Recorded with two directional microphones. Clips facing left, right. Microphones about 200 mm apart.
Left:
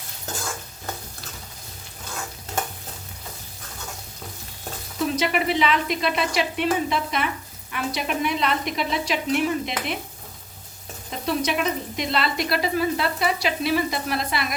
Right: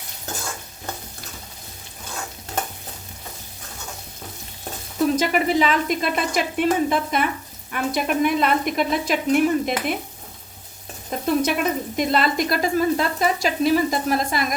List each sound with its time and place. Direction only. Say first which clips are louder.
5.1 s speech: right 1 dB; 45° right (ahead or behind)
11.3 s speech: right 3 dB; 50° right (ahead or behind)